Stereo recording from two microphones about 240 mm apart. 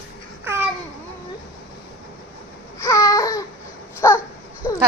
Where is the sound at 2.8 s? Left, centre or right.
Centre.